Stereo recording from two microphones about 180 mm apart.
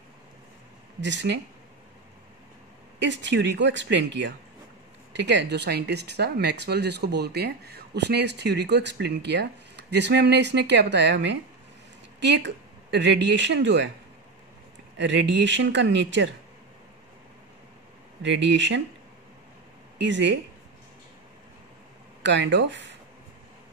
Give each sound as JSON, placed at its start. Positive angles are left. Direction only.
{"t": 1.0, "sound": "speech", "side_deg": -80}
{"t": 3.0, "sound": "speech", "side_deg": -80}
{"t": 15.0, "sound": "speech", "side_deg": -75}
{"t": 18.2, "sound": "speech", "side_deg": -80}
{"t": 20.0, "sound": "speech", "side_deg": -75}
{"t": 22.2, "sound": "speech", "side_deg": -75}